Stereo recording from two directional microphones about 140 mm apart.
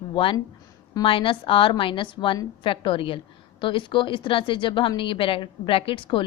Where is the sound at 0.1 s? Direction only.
40° left (ahead or behind).